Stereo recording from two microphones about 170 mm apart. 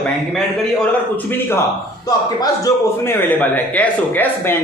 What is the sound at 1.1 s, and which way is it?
A man's voice, 10° left (ahead or behind).